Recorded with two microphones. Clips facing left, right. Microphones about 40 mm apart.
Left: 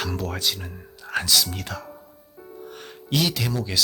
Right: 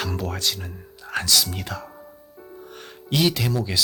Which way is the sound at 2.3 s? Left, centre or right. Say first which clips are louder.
Left 3 dB; centre.